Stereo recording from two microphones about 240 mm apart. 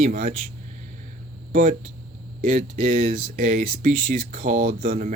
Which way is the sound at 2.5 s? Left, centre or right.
Right.